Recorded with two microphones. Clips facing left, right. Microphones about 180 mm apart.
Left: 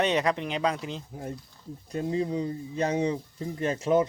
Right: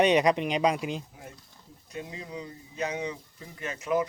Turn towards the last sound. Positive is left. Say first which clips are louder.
# left 5 dB
turn(degrees=30)  # may be behind; listen again after turning